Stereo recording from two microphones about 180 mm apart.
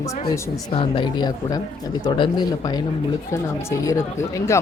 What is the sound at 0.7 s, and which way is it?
Speech, 30° left (ahead or behind).